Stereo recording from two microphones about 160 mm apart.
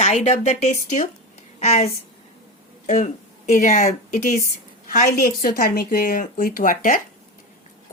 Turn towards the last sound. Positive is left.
turn(degrees=55)  # may be behind; listen again after turning